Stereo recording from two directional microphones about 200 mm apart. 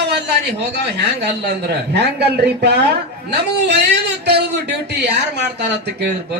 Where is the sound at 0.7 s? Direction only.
55° right (ahead or behind).